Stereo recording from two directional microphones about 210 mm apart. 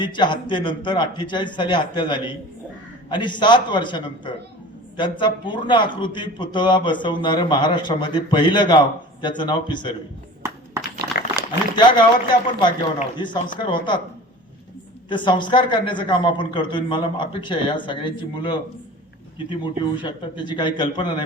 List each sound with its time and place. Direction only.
0.0 s a man's voice: 20° left (ahead or behind)
10.4 s a sound: 15° right (ahead or behind)
11.8 s a man's voice: 20° left (ahead or behind)
15.1 s a man's voice: 20° left (ahead or behind)